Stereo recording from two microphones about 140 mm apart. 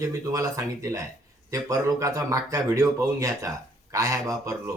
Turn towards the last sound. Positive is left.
turn(degrees=-25)  # may be behind; listen again after turning